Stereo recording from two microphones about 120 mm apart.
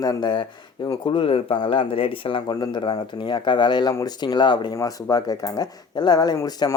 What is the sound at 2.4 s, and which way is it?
Speech, 35° left (ahead or behind).